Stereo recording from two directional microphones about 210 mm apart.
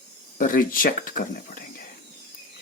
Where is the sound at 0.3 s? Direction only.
40° left (ahead or behind).